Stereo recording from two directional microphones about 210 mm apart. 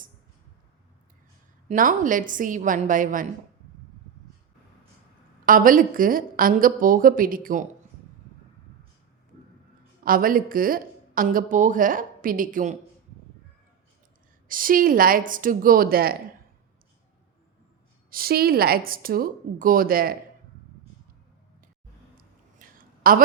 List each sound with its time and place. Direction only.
1.6 s a woman's voice: 35° right (ahead or behind)
5.5 s a woman's voice: 40° right (ahead or behind)
10.0 s a woman's voice: 40° right (ahead or behind)
14.4 s a woman's voice: 40° right (ahead or behind)
18.1 s speech: 45° right (ahead or behind)
22.2 s a sound: 40° right (ahead or behind)